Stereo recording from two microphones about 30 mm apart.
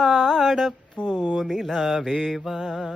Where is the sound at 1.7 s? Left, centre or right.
Centre.